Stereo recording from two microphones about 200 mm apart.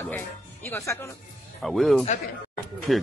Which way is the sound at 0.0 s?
10° left (ahead or behind).